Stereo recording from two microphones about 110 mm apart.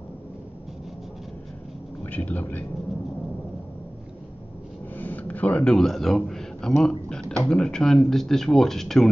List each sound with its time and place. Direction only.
2.0 s speech: 15° left (ahead or behind)
4.9 s a sound: 15° left (ahead or behind)
7.4 s speech: 5° left (ahead or behind)